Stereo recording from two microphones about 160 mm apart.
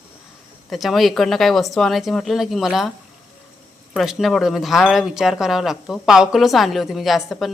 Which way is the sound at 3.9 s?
Centre (ahead or behind).